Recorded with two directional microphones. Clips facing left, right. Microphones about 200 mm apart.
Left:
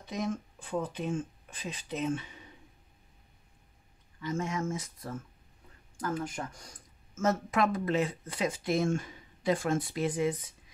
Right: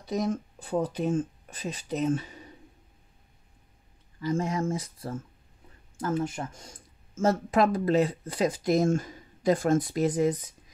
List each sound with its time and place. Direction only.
0.0 s speech: 40° right (ahead or behind)
4.2 s speech: 35° right (ahead or behind)